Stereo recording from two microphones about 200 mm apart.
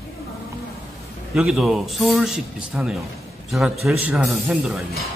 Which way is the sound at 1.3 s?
Centre (ahead or behind).